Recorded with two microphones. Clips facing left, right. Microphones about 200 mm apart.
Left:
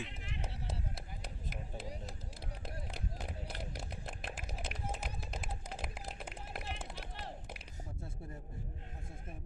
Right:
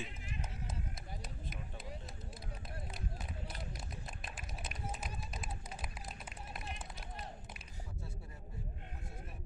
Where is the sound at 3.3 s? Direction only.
80° left.